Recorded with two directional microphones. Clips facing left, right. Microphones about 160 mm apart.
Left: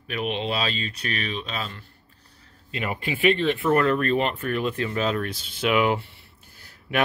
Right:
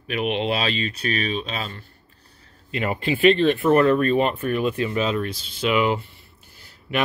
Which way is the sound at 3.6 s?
20° right (ahead or behind).